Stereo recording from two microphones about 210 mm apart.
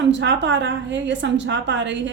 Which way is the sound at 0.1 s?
60° right (ahead or behind).